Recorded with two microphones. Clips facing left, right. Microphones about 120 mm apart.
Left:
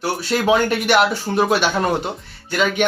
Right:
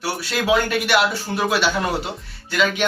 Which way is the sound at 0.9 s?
50° left (ahead or behind).